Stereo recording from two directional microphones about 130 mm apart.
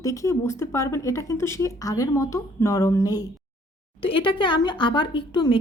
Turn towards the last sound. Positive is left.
turn(degrees=40)  # may be behind; listen again after turning